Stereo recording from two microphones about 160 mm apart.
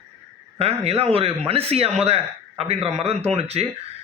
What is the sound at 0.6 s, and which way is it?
A man's voice, 40° right (ahead or behind).